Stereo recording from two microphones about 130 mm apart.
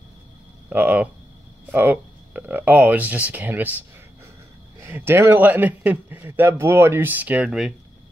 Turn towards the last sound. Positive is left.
turn(degrees=-5)  # may be behind; listen again after turning